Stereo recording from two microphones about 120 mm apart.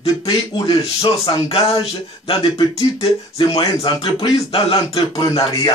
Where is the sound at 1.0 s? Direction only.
50° left (ahead or behind).